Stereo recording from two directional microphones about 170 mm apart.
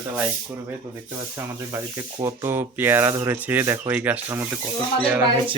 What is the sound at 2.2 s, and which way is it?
Speech, 15° right (ahead or behind).